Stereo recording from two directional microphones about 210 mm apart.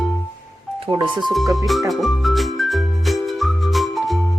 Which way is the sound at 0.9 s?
25° right (ahead or behind).